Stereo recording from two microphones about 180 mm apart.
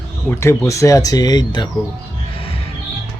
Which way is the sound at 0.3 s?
15° left (ahead or behind).